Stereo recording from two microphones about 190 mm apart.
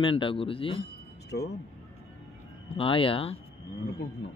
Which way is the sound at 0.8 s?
60° left (ahead or behind).